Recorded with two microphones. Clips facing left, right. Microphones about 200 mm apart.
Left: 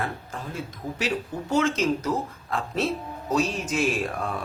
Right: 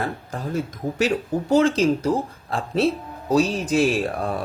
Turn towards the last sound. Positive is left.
turn(degrees=-35)  # may be behind; listen again after turning